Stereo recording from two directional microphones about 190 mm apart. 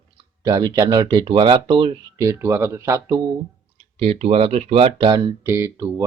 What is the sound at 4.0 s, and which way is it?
Speech, 35° right (ahead or behind).